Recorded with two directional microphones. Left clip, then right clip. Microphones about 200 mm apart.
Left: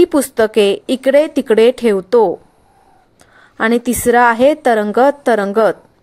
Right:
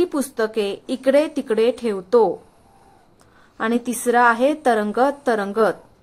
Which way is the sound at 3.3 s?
25° left (ahead or behind).